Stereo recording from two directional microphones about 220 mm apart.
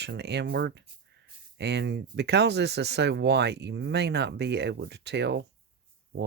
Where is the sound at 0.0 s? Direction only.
50° right (ahead or behind).